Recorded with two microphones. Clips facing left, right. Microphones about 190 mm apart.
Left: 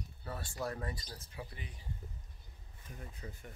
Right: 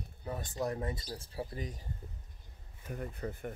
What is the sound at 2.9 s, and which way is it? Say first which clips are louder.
Speech: right 10 dB; 60° right (ahead or behind).